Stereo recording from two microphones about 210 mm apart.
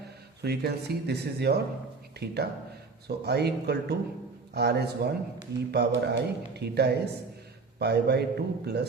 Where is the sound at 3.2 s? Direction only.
50° right (ahead or behind).